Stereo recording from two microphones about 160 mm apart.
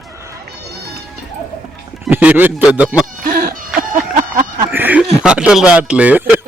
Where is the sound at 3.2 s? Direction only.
65° right (ahead or behind).